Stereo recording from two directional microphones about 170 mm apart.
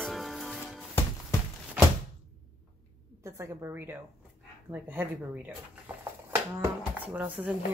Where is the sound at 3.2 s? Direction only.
15° right (ahead or behind).